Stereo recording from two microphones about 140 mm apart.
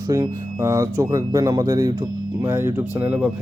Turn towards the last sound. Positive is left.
turn(degrees=-15)  # may be behind; listen again after turning